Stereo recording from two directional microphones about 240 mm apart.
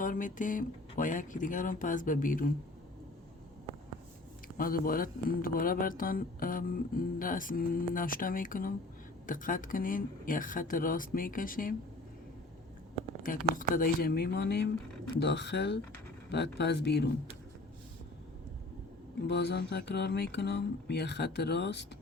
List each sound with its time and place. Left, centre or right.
0.0 s speech: left
4.5 s speech: left
13.2 s speech: left
19.3 s speech: left